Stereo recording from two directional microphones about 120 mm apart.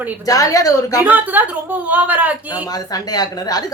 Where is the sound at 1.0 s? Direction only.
15° right (ahead or behind).